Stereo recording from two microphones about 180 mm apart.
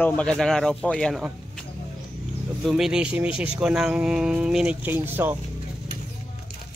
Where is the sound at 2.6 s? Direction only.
5° right (ahead or behind).